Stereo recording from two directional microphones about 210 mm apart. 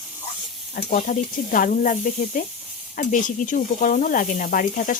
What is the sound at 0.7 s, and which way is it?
Speech, 40° left (ahead or behind).